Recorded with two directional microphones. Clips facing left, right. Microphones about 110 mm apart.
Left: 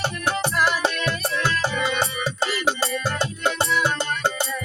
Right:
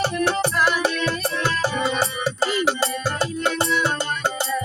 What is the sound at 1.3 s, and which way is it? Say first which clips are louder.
Music: right 1 dB; 35° right (ahead or behind).